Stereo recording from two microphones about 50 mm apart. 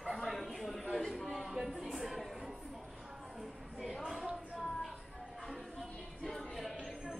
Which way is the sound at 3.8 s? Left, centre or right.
Centre.